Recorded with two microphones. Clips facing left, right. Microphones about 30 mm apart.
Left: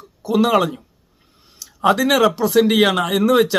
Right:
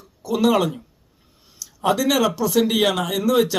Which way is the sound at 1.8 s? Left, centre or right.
Left.